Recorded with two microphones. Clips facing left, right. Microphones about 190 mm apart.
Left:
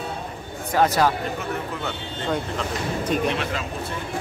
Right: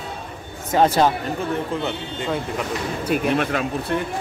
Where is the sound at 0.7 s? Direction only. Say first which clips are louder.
Right 3 dB; 25° right (ahead or behind).